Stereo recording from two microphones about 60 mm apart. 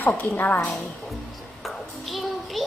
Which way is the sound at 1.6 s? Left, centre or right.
Centre.